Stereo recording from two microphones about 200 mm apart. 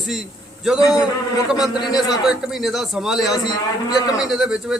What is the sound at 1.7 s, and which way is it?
Speech, 20° left (ahead or behind).